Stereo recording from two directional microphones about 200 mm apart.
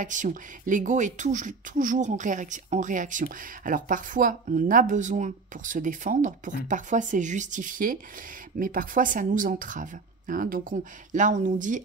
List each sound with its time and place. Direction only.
0.0 s speech: 40° right (ahead or behind)